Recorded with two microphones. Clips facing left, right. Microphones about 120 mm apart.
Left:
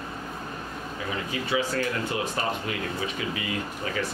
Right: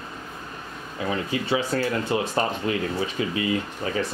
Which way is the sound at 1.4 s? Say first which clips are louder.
Right 1 dB; 30° right (ahead or behind).